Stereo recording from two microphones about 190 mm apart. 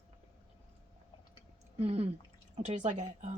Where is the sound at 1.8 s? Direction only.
35° right (ahead or behind).